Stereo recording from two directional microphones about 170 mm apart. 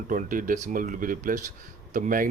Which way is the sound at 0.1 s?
55° right (ahead or behind).